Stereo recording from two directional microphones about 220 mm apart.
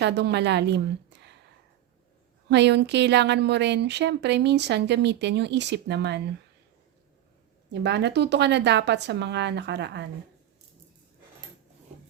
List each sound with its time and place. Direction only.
0.0 s a woman's voice: 50° right (ahead or behind)
1.1 s a sound: 50° right (ahead or behind)
2.5 s a woman's voice: 50° right (ahead or behind)
7.7 s a woman's voice: 50° right (ahead or behind)